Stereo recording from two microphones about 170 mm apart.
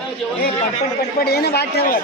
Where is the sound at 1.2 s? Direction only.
70° left (ahead or behind).